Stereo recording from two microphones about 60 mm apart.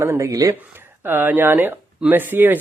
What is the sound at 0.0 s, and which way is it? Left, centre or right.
Speech, right.